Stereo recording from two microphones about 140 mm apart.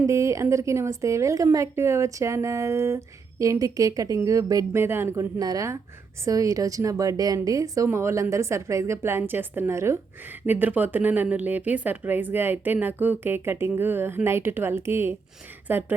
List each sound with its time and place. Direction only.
0.0 s a woman's voice: 20° right (ahead or behind)